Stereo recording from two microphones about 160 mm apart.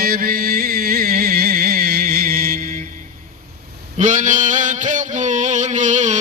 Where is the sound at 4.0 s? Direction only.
55° right (ahead or behind).